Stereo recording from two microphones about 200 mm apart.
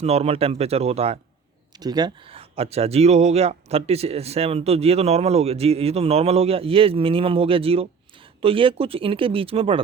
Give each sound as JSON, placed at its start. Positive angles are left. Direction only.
{"t": 0.0, "sound": "speech", "side_deg": -30}
{"t": 1.8, "sound": "speech", "side_deg": -20}